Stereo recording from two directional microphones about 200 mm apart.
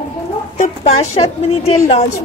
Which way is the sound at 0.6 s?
35° left (ahead or behind).